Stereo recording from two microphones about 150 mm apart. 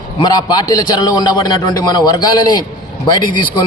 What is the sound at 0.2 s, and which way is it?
A man's voice, 25° left (ahead or behind).